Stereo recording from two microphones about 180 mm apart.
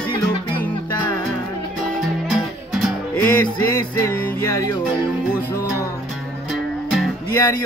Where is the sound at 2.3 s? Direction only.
Centre (ahead or behind).